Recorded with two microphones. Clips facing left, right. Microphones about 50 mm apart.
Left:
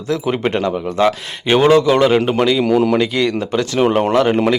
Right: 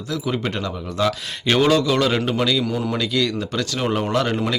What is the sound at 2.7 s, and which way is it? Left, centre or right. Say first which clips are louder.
Speech: left 10 dB; left.